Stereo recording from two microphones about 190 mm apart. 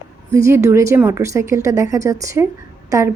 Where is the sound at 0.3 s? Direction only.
15° right (ahead or behind).